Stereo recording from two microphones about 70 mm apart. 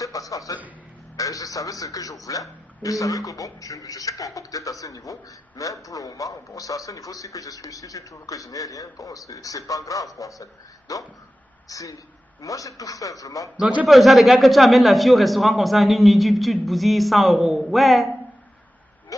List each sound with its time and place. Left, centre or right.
0.0 s a sound: left
1.1 s a man's voice: left
13.6 s a man's voice: centre
13.8 s a man's voice: centre